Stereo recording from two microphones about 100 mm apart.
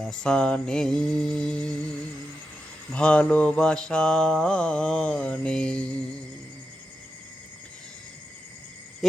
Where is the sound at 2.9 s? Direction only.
10° left (ahead or behind).